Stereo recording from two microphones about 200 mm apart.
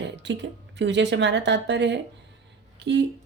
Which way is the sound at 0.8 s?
60° right (ahead or behind).